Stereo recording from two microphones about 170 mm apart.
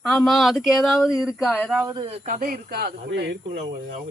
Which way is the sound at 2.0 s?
35° right (ahead or behind).